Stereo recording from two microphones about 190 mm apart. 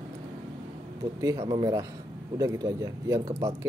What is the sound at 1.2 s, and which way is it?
Speech, 20° right (ahead or behind).